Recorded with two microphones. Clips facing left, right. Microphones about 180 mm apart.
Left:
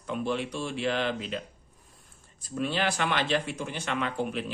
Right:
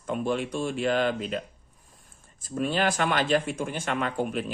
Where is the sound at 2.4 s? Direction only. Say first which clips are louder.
Right 3 dB; 45° right (ahead or behind).